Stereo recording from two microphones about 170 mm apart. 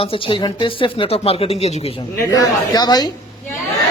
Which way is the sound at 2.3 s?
20° left (ahead or behind).